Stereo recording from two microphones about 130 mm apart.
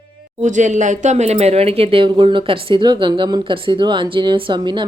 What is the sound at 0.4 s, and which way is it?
Speech, 70° right (ahead or behind).